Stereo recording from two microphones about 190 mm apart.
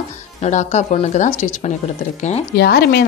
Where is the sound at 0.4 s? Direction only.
40° left (ahead or behind).